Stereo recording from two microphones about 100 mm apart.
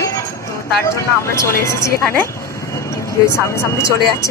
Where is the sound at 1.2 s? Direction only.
30° left (ahead or behind).